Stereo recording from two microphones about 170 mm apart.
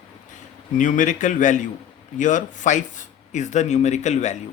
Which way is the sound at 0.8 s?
50° left (ahead or behind).